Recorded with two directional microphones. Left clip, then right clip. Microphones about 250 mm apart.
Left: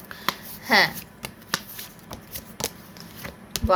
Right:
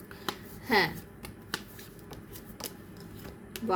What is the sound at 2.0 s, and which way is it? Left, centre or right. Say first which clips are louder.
Shuffling cards: left 7 dB; left.